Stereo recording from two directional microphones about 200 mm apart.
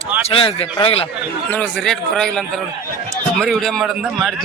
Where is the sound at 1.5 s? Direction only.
5° left (ahead or behind).